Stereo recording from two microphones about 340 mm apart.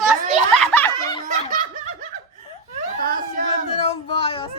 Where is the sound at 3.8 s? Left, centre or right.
Centre.